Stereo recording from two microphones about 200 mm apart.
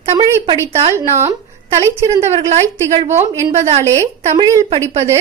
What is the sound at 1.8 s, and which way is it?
Speech, 15° right (ahead or behind).